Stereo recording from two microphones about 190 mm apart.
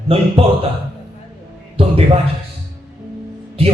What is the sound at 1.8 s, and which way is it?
Speech, 30° right (ahead or behind).